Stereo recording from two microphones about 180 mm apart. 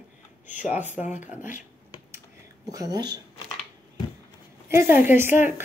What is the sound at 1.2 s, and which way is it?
Speech, 45° left (ahead or behind).